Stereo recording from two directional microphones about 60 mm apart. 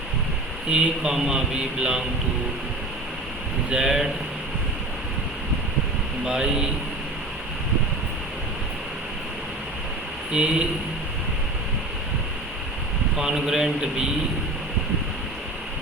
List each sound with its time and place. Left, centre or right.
0.7 s a man's voice: centre
3.7 s a man's voice: centre
6.2 s a man's voice: centre
10.3 s a man's voice: centre
13.1 s a man's voice: centre